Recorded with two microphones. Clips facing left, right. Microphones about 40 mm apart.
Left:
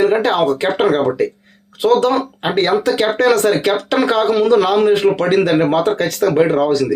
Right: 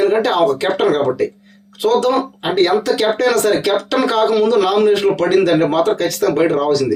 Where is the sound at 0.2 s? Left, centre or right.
Left.